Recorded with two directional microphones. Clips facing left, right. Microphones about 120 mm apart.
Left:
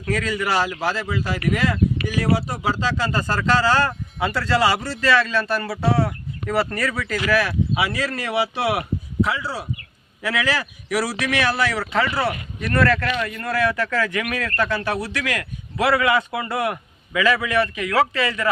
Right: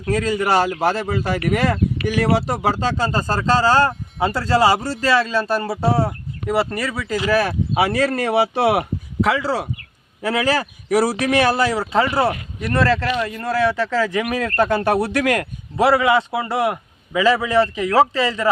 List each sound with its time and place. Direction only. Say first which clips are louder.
0.0 s speech: right 4 dB; 35° right (ahead or behind); by 2.9 s 60° right (ahead or behind)
3.0 s a man's voice: right 2 dB; 40° right (ahead or behind)
6.0 s speech: right 1 dB; 15° right (ahead or behind)
7.3 s speech: right 3 dB; 40° right (ahead or behind)
9.2 s speech: right 8 dB; 90° right
10.2 s a man's voice: right 4 dB; 40° right (ahead or behind)
12.3 s speech: right 2 dB; 20° right (ahead or behind)